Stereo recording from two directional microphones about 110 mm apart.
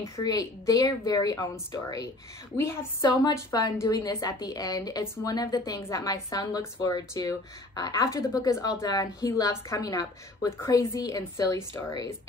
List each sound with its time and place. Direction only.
0.0 s a woman's voice: 30° left (ahead or behind)